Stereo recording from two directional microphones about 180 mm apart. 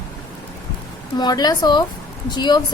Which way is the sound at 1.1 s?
20° left (ahead or behind).